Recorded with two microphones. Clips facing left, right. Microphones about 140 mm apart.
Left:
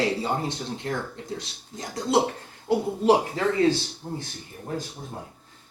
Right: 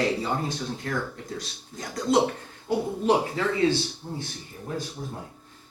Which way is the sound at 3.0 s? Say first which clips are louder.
Left 3 dB; 35° left (ahead or behind).